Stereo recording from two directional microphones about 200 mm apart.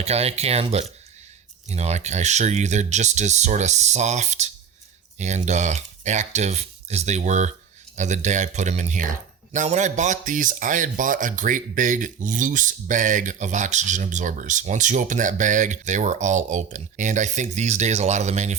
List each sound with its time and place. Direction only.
0.0 s speech: 30° right (ahead or behind)